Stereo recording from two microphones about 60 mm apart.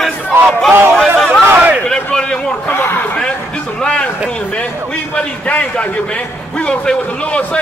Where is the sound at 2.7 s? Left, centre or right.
Left.